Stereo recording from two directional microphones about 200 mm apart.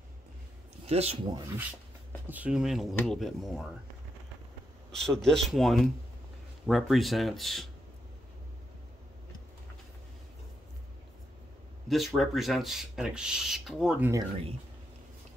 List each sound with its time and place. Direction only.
0.8 s speech: 30° right (ahead or behind)
2.2 s speech: 5° right (ahead or behind)
4.9 s speech: centre (ahead or behind)
11.9 s speech: centre (ahead or behind)